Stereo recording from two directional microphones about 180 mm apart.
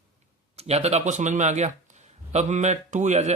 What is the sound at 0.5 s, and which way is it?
Speech, 35° right (ahead or behind).